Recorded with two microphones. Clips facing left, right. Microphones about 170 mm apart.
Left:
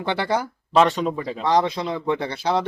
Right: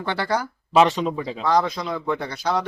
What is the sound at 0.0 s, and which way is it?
Speech, 20° left (ahead or behind).